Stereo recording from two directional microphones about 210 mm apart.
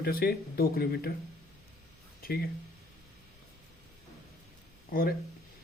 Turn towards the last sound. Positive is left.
turn(degrees=45)  # may be behind; listen again after turning